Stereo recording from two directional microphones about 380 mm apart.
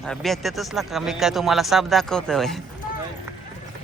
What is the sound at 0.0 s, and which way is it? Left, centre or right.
Speech, centre.